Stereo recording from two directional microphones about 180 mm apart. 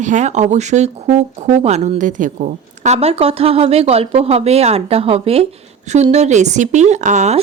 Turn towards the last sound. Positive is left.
turn(degrees=-40)  # may be behind; listen again after turning